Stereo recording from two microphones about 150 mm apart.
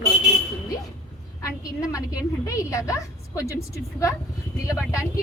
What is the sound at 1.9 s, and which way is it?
A woman's voice, 20° left (ahead or behind).